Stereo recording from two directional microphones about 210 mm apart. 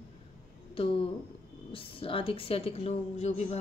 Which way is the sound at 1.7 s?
25° left (ahead or behind).